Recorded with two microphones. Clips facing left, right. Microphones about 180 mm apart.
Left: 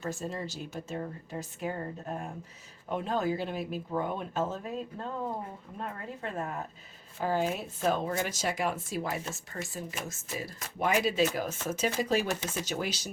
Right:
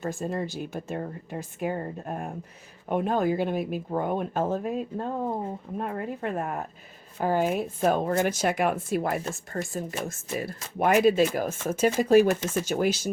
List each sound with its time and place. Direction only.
0.0 s speech: 55° right (ahead or behind)